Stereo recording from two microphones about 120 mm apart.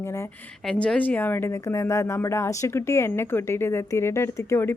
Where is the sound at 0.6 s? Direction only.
10° left (ahead or behind).